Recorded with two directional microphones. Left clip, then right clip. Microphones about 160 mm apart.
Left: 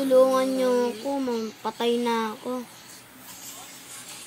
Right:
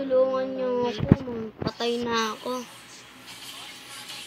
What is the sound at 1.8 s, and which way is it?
Speech, 60° left (ahead or behind).